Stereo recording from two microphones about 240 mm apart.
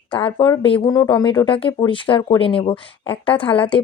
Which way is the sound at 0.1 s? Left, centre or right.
Left.